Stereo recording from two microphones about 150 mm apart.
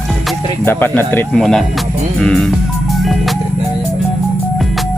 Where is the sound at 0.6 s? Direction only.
15° left (ahead or behind).